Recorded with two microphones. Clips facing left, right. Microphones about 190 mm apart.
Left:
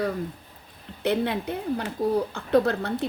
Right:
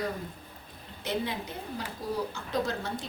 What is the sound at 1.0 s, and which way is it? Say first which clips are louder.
A woman's voice: left 8 dB; 60° left (ahead or behind).